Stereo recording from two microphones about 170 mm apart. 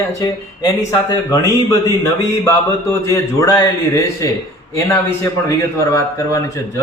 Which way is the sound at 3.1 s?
20° left (ahead or behind).